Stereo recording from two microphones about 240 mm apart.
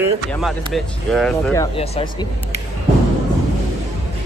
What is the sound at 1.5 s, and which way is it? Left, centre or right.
Speech, left.